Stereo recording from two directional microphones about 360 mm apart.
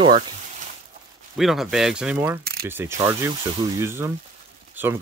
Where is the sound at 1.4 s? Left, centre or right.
Centre.